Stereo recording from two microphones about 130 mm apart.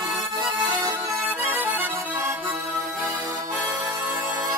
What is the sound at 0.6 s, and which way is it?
Music, 30° right (ahead or behind).